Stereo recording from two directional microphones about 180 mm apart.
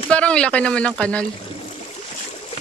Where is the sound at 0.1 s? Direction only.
5° left (ahead or behind).